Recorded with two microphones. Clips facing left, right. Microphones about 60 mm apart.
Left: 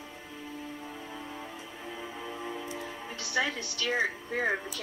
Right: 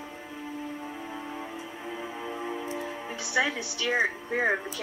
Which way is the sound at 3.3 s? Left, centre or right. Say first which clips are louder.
Right 3 dB; centre.